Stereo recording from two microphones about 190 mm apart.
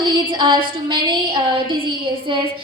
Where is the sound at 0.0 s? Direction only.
25° right (ahead or behind).